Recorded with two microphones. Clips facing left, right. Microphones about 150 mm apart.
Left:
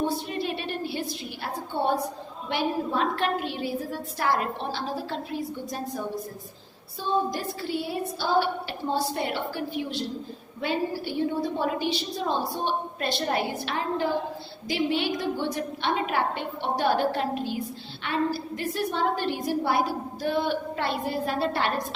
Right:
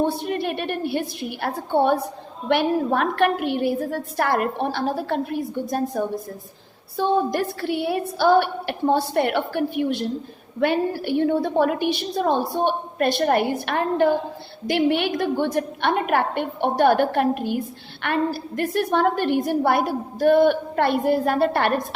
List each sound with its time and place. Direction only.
0.3 s a woman's voice: 55° right (ahead or behind)
6.9 s a woman's voice: 65° right (ahead or behind)